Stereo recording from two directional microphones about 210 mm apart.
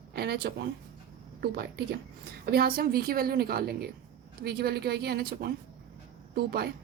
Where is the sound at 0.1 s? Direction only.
50° right (ahead or behind).